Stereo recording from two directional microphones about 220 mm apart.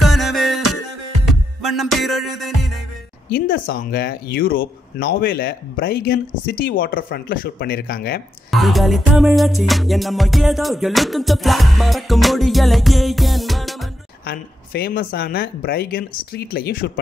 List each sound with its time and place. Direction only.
0.1 s music: centre (ahead or behind)
0.6 s music: 90° left
1.7 s music: centre (ahead or behind)
3.3 s speech: 40° left (ahead or behind)
8.5 s music: centre (ahead or behind)
14.2 s speech: 45° left (ahead or behind)